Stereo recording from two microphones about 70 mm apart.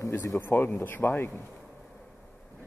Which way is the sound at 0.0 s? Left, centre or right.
Left.